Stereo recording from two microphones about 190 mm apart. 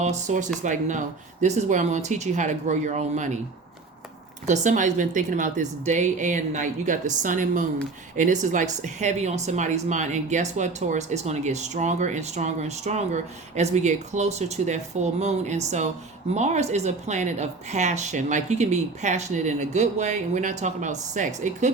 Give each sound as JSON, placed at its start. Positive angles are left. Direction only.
{"t": 0.0, "sound": "speech", "side_deg": -40}
{"t": 4.4, "sound": "speech", "side_deg": -40}